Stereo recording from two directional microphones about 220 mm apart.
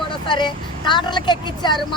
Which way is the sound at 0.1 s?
20° left (ahead or behind).